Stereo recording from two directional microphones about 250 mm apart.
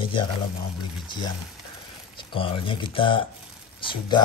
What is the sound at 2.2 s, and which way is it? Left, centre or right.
Speech, left.